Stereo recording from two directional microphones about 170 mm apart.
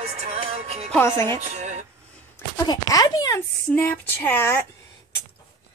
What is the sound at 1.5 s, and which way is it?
Speech, 40° right (ahead or behind).